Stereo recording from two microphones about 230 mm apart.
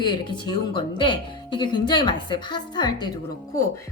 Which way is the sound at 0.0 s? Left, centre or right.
Centre.